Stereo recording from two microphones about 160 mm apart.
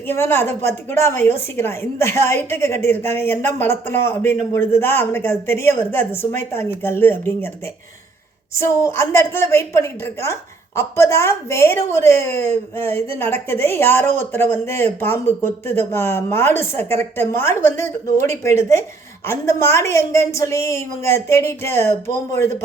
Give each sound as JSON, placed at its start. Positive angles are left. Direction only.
{"t": 0.1, "sound": "a woman's voice", "side_deg": 15}
{"t": 8.5, "sound": "a woman's voice", "side_deg": 15}